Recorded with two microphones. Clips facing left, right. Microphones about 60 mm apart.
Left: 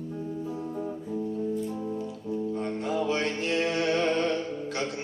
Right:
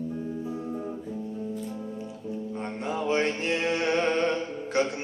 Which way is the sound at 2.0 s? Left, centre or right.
Right.